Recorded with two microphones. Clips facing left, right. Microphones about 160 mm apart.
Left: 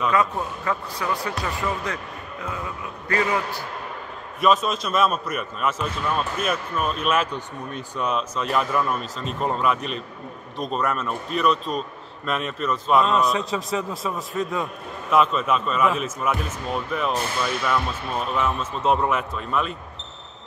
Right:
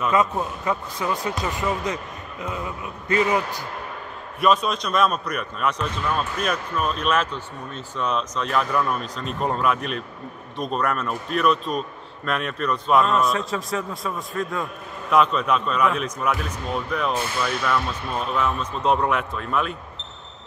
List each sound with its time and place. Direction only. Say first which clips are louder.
0.1 s speech: right 1 dB; 20° right (ahead or behind)
4.4 s a man's voice: even; centre (ahead or behind)
18.3 s a man's voice: right 1 dB; 5° left (ahead or behind)